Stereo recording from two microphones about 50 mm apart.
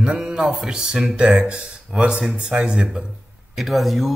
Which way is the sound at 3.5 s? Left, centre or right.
Centre.